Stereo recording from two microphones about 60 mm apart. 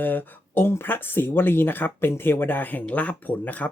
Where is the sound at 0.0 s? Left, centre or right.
Left.